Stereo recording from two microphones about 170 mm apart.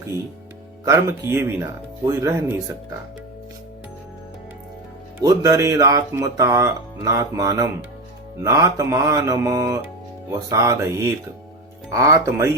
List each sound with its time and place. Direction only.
0.9 s speech: 15° right (ahead or behind)
5.2 s speech: 20° right (ahead or behind)
11.9 s speech: 15° right (ahead or behind)